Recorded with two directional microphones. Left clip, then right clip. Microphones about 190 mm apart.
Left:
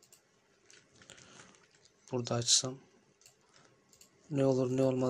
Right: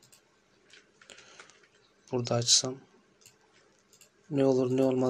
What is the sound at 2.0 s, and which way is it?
Speech, 25° left (ahead or behind).